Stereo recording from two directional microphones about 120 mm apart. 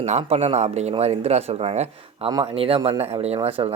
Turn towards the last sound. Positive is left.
turn(degrees=-50)  # may be behind; listen again after turning